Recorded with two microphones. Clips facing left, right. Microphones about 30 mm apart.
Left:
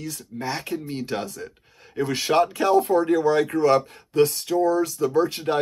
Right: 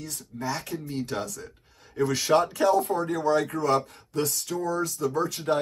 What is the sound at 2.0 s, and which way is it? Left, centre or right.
Speech, left.